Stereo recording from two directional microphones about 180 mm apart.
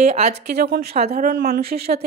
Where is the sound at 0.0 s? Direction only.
35° right (ahead or behind).